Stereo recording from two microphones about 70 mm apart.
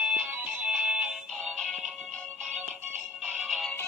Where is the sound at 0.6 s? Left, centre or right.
Centre.